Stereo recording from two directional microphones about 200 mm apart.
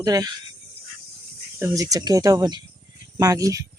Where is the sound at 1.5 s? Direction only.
15° right (ahead or behind).